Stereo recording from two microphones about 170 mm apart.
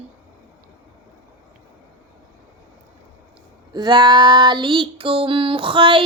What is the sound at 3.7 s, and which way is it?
Child singing, 25° right (ahead or behind).